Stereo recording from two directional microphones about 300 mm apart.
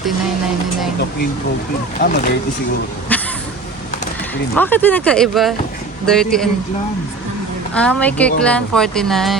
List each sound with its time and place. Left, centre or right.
2.0 s speech: left
3.1 s a sound: centre
4.5 s speech: centre
7.7 s speech: centre